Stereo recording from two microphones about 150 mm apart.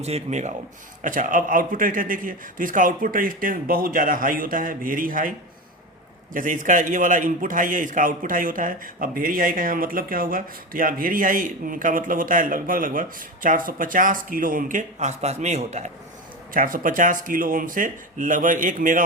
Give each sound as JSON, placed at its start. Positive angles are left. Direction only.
{"t": 0.0, "sound": "speech", "side_deg": -50}
{"t": 1.0, "sound": "a man's voice", "side_deg": -60}
{"t": 6.3, "sound": "a man's voice", "side_deg": -60}
{"t": 16.5, "sound": "a man's voice", "side_deg": -65}